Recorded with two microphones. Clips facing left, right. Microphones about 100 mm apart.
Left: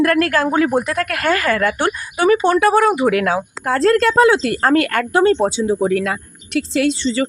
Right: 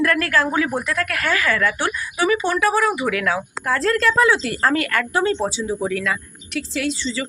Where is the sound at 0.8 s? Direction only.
50° left (ahead or behind).